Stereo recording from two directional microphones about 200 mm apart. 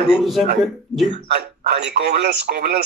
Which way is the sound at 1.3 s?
55° right (ahead or behind).